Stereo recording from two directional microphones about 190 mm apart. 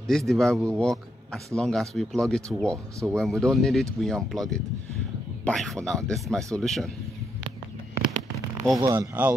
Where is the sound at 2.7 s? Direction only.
15° right (ahead or behind).